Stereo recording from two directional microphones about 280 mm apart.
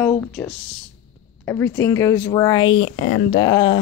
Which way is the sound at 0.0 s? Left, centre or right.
Centre.